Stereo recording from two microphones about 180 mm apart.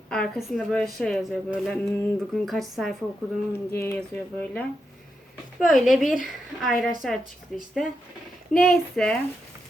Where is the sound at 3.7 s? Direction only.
15° left (ahead or behind).